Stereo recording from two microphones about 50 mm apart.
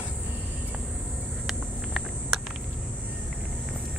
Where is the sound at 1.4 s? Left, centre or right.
Centre.